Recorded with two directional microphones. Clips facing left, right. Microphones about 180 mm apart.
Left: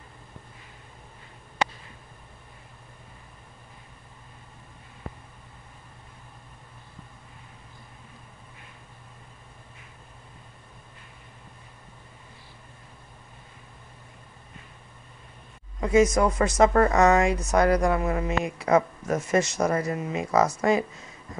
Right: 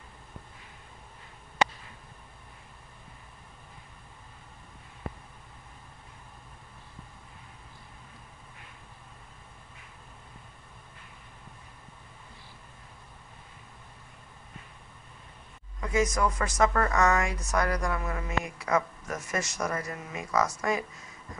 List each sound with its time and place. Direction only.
15.8 s speech: 25° left (ahead or behind)